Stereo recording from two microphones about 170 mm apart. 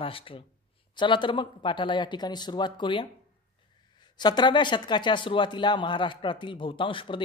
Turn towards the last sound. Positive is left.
turn(degrees=30)  # may be behind; listen again after turning